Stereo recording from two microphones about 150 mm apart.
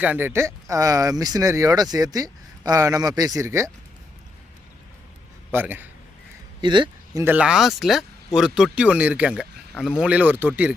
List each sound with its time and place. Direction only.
0.0 s speech: 10° right (ahead or behind)
5.5 s a man's voice: 10° right (ahead or behind)
6.6 s speech: 30° right (ahead or behind)
7.3 s speech: 5° right (ahead or behind)